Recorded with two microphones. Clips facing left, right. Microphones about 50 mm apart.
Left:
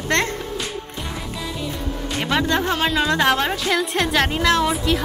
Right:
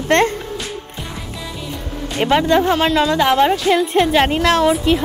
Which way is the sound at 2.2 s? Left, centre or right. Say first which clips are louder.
Right 7 dB; centre.